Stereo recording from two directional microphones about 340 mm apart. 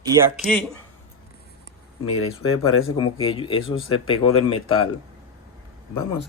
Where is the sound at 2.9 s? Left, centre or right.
Centre.